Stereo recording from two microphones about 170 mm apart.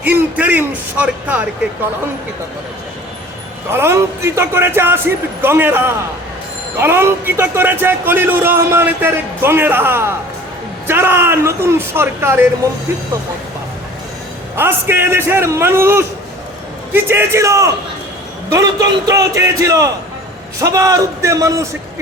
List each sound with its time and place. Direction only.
0.0 s speech: 10° right (ahead or behind)
3.7 s speech: 15° right (ahead or behind)
14.5 s a man's voice: 15° right (ahead or behind)